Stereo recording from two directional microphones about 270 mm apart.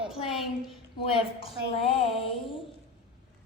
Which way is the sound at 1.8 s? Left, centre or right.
Left.